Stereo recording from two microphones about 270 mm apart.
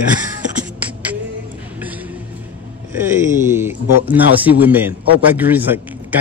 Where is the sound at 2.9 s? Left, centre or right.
Centre.